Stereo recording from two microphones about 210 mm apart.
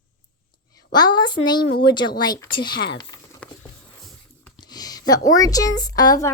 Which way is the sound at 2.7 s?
55° left (ahead or behind).